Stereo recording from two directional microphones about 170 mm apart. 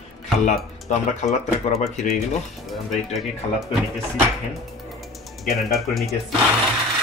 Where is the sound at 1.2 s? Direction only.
40° left (ahead or behind).